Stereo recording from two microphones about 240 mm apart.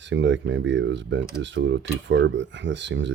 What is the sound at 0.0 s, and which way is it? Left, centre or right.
Speech, right.